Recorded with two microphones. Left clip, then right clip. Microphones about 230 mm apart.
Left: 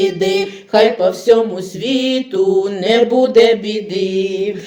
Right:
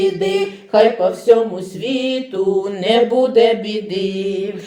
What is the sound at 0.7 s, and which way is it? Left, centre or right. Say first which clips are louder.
Music: left 1 dB; left.